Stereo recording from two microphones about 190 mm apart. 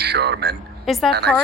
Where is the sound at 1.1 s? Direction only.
60° right (ahead or behind).